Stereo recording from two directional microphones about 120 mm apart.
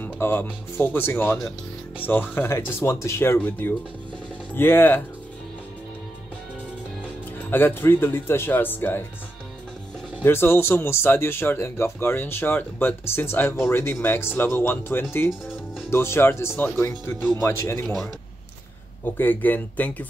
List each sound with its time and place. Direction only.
0.0 s speech: 15° left (ahead or behind)
7.5 s speech: 20° left (ahead or behind)
10.2 s speech: 20° left (ahead or behind)
17.8 s speech: centre (ahead or behind)
19.1 s speech: 15° left (ahead or behind)